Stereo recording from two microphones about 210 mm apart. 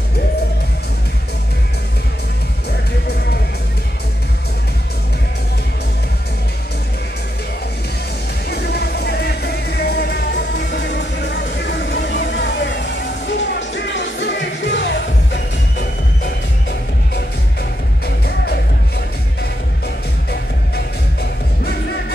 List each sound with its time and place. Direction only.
8.5 s music: 50° left (ahead or behind)
18.0 s music: 50° left (ahead or behind)